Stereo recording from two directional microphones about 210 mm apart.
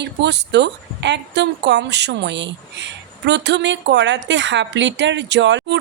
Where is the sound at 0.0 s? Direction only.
55° right (ahead or behind).